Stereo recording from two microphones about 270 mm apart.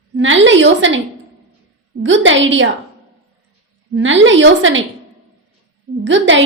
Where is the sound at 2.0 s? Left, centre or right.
Right.